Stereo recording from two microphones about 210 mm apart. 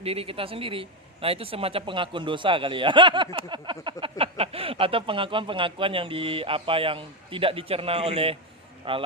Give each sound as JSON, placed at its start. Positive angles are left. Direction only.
{"t": 0.0, "sound": "a man's voice", "side_deg": -25}